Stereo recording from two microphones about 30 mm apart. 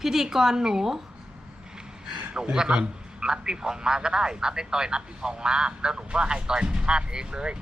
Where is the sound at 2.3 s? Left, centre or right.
Right.